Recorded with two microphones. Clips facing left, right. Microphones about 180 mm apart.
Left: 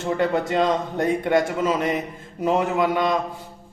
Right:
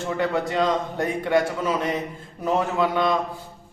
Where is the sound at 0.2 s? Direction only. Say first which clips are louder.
Left 1 dB; 20° left (ahead or behind).